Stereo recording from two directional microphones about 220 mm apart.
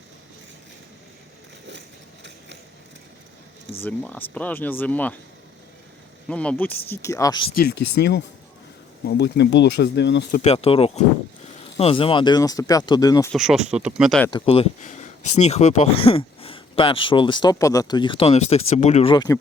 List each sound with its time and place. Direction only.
3.8 s speech: 5° left (ahead or behind)
6.2 s speech: 5° left (ahead or behind)
7.6 s speech: 50° left (ahead or behind)
10.4 s speech: 25° left (ahead or behind)
13.3 s speech: centre (ahead or behind)
14.3 s speech: 25° left (ahead or behind)